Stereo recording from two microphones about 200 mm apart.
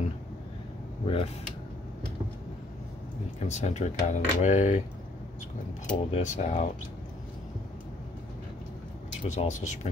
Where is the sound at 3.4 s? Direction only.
35° left (ahead or behind).